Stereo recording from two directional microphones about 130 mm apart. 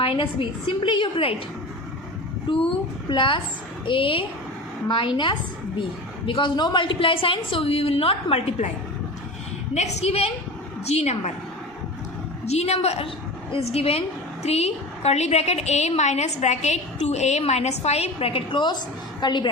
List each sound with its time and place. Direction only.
0.0 s a woman's voice: 45° left (ahead or behind)
2.5 s a woman's voice: 40° left (ahead or behind); by 8.7 s 55° left (ahead or behind)
9.7 s a woman's voice: 55° left (ahead or behind)
12.5 s a woman's voice: 55° left (ahead or behind); by 19.5 s 35° left (ahead or behind)